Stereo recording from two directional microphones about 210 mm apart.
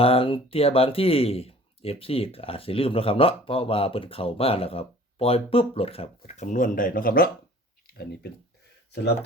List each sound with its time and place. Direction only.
0.0 s speech: 25° left (ahead or behind); by 8.3 s 45° left (ahead or behind)